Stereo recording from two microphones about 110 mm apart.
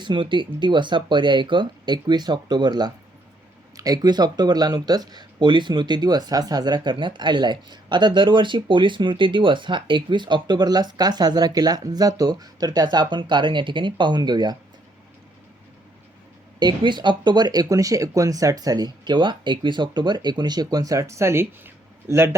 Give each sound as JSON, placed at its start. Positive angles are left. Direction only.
{"t": 0.0, "sound": "speech", "side_deg": -45}
{"t": 16.6, "sound": "speech", "side_deg": -45}